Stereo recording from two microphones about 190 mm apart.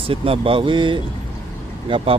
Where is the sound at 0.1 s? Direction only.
30° right (ahead or behind).